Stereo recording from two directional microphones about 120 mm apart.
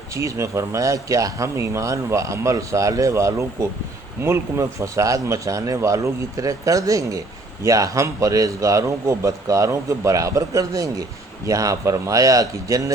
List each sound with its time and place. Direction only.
0.1 s speech: 25° right (ahead or behind)